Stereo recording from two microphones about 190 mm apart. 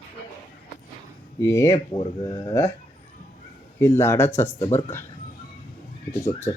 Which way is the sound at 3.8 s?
15° left (ahead or behind).